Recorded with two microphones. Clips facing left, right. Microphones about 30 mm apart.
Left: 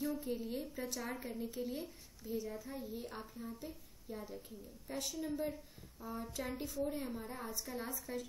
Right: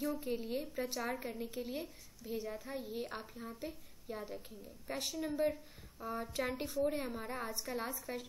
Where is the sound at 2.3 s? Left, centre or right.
Right.